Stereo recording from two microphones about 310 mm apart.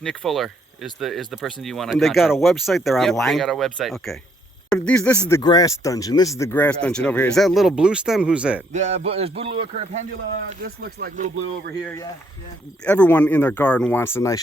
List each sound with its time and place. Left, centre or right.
0.0 s speech: centre
8.7 s a man's voice: right
12.8 s speech: centre